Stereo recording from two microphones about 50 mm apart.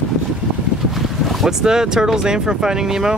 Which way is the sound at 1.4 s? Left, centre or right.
Centre.